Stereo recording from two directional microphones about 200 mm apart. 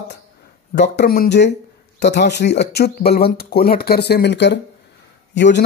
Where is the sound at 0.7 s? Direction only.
55° left (ahead or behind).